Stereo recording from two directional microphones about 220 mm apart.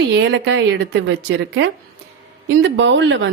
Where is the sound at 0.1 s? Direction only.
55° right (ahead or behind).